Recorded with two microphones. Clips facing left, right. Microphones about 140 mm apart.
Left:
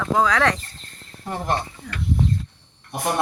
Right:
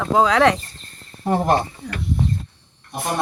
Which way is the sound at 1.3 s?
45° right (ahead or behind).